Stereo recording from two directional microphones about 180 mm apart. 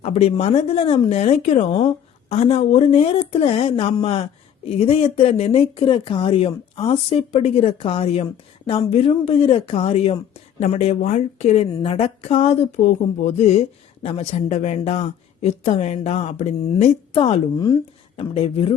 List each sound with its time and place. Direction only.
0.0 s a woman's voice: 35° left (ahead or behind)